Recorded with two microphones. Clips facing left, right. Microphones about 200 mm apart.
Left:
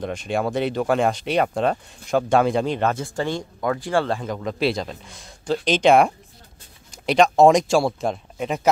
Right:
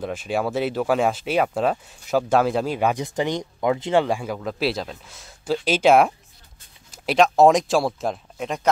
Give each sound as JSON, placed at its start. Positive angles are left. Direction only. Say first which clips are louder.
{"t": 0.0, "sound": "speech", "louder": "even", "side_deg": -5}